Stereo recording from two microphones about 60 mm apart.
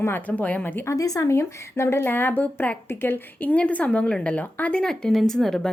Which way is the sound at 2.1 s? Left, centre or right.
Left.